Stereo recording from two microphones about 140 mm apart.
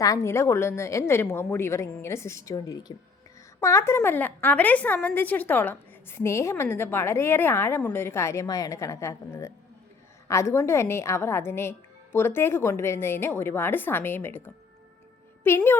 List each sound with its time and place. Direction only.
0.0 s a woman's voice: 20° left (ahead or behind)